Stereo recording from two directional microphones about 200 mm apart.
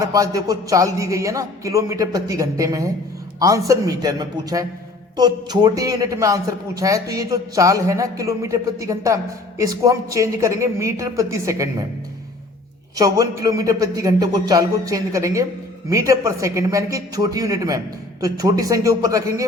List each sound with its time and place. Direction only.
0.0 s a man's voice: 15° right (ahead or behind)
13.0 s a man's voice: 20° right (ahead or behind)